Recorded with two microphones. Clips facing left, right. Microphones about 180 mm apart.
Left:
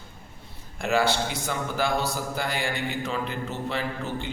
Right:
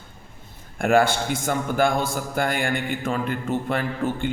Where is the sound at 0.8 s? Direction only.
50° right (ahead or behind).